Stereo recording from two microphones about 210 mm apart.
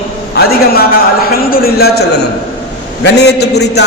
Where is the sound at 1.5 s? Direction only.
45° left (ahead or behind).